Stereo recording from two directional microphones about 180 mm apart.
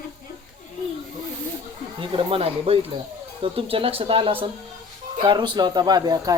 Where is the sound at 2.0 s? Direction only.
30° right (ahead or behind).